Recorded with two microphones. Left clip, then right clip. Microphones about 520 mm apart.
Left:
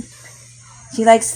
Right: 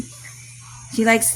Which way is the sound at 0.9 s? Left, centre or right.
Right.